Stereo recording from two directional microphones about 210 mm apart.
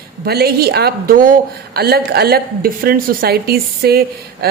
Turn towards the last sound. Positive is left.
turn(degrees=-45)  # may be behind; listen again after turning